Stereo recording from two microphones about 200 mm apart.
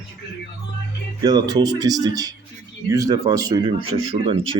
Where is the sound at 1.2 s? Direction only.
20° right (ahead or behind).